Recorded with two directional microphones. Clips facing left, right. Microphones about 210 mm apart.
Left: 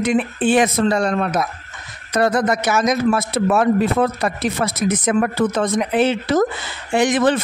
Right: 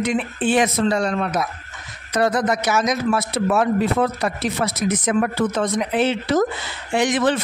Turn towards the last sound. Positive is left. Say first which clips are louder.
# left 3 dB
turn(degrees=50)  # may be behind; listen again after turning